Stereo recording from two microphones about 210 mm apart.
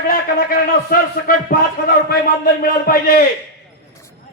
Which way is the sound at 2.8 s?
45° left (ahead or behind).